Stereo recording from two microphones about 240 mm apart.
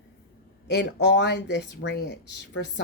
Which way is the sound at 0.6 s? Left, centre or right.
Left.